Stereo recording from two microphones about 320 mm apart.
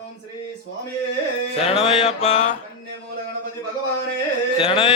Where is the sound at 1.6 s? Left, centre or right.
Centre.